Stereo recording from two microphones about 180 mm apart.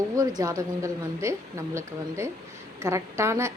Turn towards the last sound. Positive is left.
turn(degrees=-15)  # may be behind; listen again after turning